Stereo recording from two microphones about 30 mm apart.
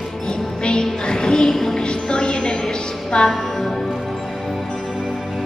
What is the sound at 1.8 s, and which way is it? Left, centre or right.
Music, left.